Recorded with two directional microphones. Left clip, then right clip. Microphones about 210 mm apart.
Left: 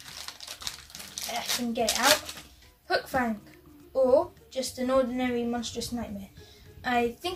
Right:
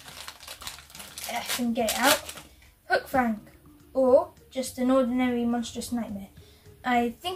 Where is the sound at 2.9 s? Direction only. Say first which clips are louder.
Right 3 dB; 20° left (ahead or behind).